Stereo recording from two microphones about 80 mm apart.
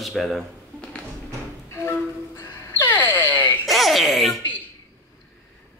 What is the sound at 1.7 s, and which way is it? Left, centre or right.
Music, left.